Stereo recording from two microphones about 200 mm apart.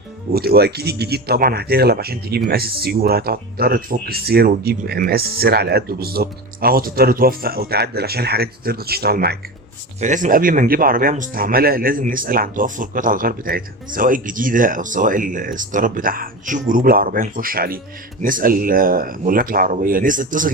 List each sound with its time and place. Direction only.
0.3 s speech: 50° right (ahead or behind)
10.0 s speech: 40° right (ahead or behind)